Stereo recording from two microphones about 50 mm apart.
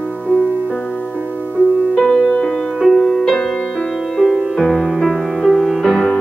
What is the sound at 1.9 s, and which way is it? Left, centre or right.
Music, centre.